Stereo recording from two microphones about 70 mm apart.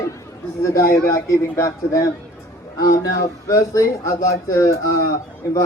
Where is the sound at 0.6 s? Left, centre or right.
Left.